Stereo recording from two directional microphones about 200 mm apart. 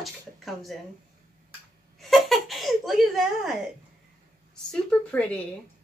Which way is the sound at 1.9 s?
Centre (ahead or behind).